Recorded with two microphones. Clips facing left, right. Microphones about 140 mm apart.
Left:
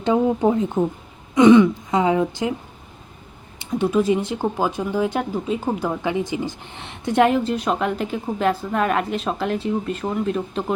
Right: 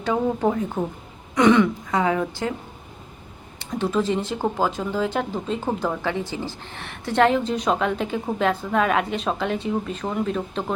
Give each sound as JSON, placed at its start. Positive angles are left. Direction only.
{"t": 0.0, "sound": "speech", "side_deg": 20}
{"t": 3.7, "sound": "speech", "side_deg": 15}